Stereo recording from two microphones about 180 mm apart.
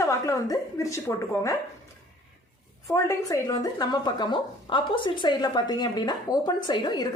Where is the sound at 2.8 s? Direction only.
15° left (ahead or behind).